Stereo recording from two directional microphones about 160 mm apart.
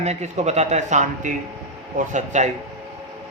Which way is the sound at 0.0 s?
45° right (ahead or behind).